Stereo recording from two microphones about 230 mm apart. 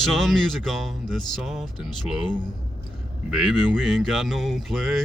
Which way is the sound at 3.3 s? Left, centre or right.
Centre.